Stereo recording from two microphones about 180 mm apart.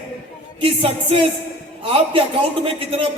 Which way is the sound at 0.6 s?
30° right (ahead or behind).